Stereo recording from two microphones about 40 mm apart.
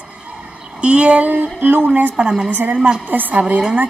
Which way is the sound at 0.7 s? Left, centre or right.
Right.